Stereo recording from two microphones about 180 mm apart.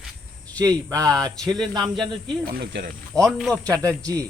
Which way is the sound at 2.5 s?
60° right (ahead or behind).